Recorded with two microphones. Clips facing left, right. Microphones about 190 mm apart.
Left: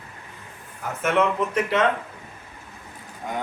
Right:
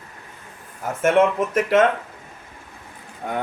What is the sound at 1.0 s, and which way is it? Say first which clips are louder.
Speech: right 4 dB; 50° right (ahead or behind).